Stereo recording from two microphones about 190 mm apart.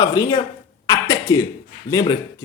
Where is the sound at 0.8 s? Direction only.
20° left (ahead or behind).